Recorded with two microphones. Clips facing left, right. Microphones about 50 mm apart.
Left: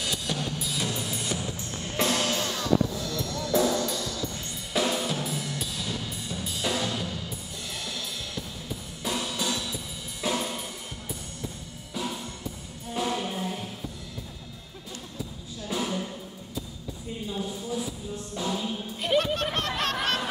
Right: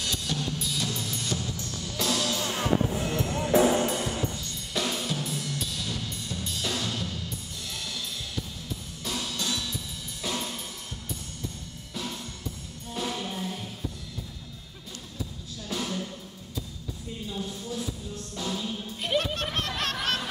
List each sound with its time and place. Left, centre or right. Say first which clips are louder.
0.0 s drum: left 1 dB; centre; by 1.7 s left
1.7 s music: left 3 dB; left
4.7 s drum kit: left 3 dB; centre
9.0 s drum kit: left 3 dB; centre
11.9 s music: left 3 dB; centre
15.7 s music: left 2 dB; centre
17.3 s music: left 3 dB; centre
18.9 s music: left 3 dB; centre